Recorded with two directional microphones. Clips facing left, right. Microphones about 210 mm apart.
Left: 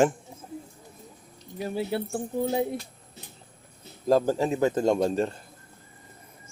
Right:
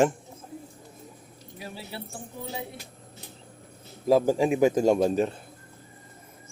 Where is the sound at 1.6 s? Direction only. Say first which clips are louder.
Left 11 dB; 50° left (ahead or behind).